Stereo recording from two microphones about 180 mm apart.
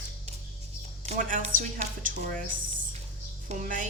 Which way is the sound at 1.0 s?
45° right (ahead or behind).